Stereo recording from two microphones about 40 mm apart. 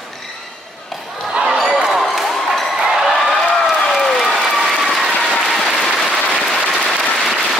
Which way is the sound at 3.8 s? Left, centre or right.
Centre.